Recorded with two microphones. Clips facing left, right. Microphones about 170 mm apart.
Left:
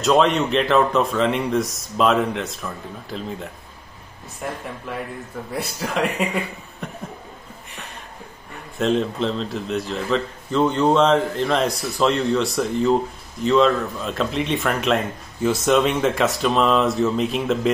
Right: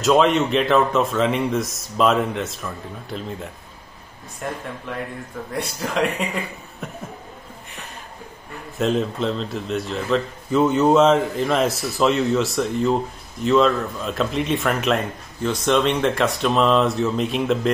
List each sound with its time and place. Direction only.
0.0 s a man's voice: centre (ahead or behind)
6.8 s a sound: 5° right (ahead or behind)
8.7 s a man's voice: centre (ahead or behind)